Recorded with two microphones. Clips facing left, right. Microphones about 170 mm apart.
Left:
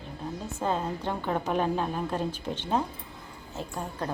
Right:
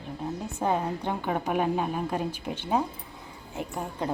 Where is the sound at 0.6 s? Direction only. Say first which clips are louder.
Right 2 dB; 15° right (ahead or behind).